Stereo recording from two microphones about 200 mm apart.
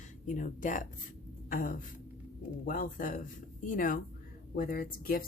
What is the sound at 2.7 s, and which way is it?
A woman's voice, 40° left (ahead or behind).